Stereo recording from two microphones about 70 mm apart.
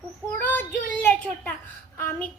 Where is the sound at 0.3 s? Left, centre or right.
Left.